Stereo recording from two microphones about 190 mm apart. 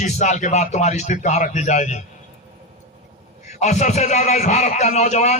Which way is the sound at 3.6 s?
35° left (ahead or behind).